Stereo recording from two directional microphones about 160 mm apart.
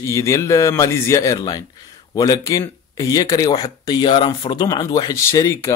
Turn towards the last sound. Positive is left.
turn(degrees=15)  # may be behind; listen again after turning